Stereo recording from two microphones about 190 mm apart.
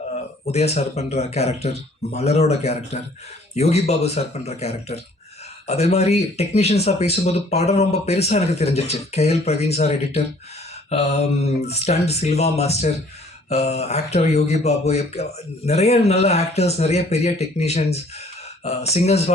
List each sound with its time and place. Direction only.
0.4 s speech: 35° left (ahead or behind)